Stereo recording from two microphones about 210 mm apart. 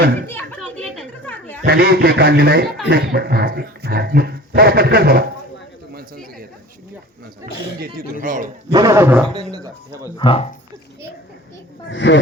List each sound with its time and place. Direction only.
0.3 s children playing: 5° left (ahead or behind)
1.6 s speech: 50° right (ahead or behind)
7.8 s speech: 40° right (ahead or behind)
8.7 s a man's voice: 15° right (ahead or behind)
9.3 s a sound: 20° right (ahead or behind)
10.2 s speech: 25° left (ahead or behind)
11.9 s speech: 60° left (ahead or behind)